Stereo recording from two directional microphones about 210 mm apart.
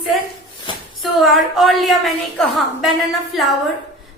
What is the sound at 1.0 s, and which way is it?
A woman's voice, centre (ahead or behind).